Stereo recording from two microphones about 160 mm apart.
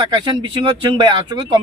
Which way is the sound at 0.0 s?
30° right (ahead or behind).